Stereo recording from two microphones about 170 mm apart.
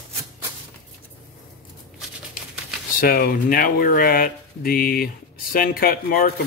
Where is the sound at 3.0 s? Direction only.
60° left (ahead or behind).